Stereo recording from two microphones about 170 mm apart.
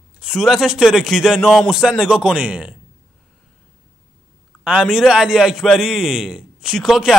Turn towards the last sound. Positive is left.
turn(degrees=0)  # may be behind; listen again after turning